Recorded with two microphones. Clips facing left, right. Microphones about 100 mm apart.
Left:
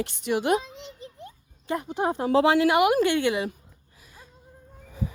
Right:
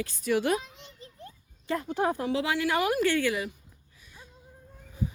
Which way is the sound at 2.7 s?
20° left (ahead or behind).